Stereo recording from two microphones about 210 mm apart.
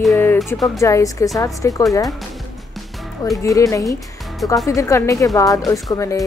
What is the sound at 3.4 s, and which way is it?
Speech, 15° left (ahead or behind).